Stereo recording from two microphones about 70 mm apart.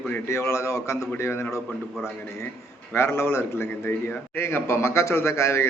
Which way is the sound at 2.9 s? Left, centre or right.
Left.